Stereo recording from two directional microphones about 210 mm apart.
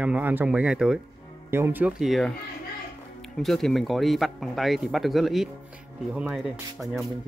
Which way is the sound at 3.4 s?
Centre (ahead or behind).